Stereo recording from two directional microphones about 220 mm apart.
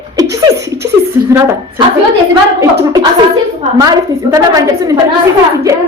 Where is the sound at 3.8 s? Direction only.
15° right (ahead or behind).